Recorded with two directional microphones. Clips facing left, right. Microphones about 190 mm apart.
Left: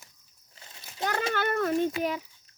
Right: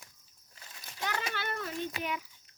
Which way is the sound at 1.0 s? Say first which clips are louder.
Left 8 dB; 45° left (ahead or behind).